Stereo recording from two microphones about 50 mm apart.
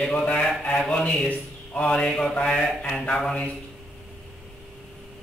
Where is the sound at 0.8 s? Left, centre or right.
Left.